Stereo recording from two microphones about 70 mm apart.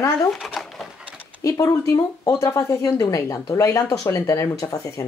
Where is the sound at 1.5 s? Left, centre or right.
Left.